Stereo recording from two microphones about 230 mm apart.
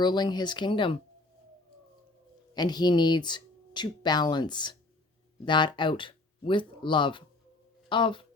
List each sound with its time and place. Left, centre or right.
0.0 s speech: centre
2.6 s speech: centre